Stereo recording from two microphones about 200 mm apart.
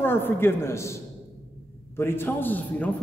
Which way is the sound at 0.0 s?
10° left (ahead or behind).